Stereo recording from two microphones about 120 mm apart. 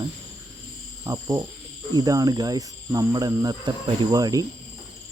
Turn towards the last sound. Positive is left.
turn(degrees=-30)  # may be behind; listen again after turning